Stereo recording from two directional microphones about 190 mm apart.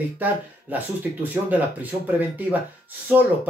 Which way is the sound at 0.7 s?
10° right (ahead or behind).